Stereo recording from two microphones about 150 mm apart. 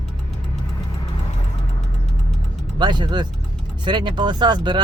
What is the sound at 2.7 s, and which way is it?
Speech, 30° right (ahead or behind).